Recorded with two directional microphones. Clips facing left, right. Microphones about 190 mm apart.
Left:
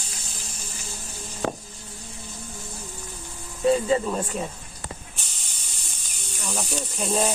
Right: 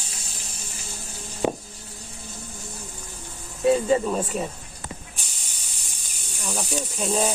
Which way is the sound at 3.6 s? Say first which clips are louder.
Right 1 dB; 5° right (ahead or behind).